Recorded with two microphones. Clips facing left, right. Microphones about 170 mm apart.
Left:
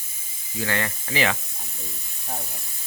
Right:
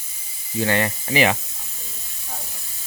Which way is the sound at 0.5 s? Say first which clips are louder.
Right 6 dB; 20° right (ahead or behind).